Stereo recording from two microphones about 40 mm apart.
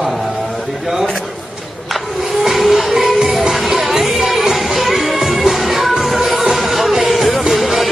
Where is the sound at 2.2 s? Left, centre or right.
Centre.